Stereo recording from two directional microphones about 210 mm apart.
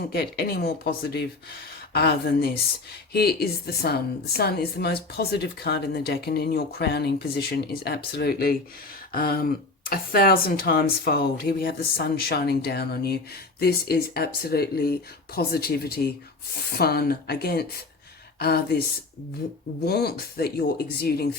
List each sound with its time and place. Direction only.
0.1 s a woman's voice: 50° left (ahead or behind)